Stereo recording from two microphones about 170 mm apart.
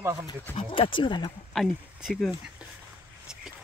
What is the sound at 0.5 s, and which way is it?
Speech, 30° left (ahead or behind).